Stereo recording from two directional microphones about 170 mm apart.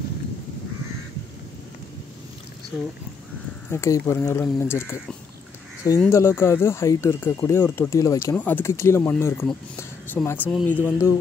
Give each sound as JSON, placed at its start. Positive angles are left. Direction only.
{"t": 3.7, "sound": "speech", "side_deg": 15}
{"t": 9.8, "sound": "a sound", "side_deg": 15}
{"t": 10.7, "sound": "speech", "side_deg": 15}